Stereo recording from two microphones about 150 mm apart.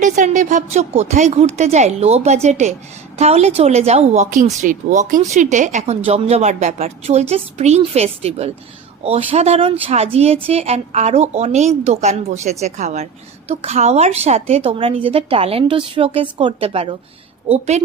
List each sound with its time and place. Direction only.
0.0 s a woman's voice: 55° right (ahead or behind)